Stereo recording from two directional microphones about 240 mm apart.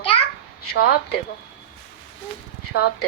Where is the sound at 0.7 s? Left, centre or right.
Left.